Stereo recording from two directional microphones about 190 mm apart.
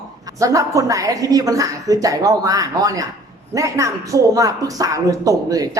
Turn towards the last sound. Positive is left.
turn(degrees=-20)  # may be behind; listen again after turning